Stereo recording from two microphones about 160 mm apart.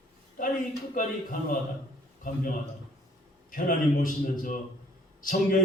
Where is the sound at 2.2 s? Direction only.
60° left (ahead or behind).